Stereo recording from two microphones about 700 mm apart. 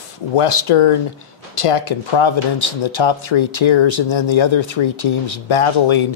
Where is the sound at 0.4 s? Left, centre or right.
Left.